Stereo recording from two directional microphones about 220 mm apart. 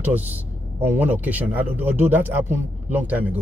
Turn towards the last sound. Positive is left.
turn(degrees=-5)  # may be behind; listen again after turning